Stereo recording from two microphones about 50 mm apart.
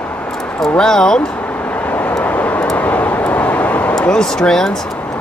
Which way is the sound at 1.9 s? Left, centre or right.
Left.